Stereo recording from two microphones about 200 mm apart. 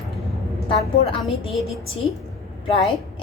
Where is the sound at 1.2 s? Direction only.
Centre (ahead or behind).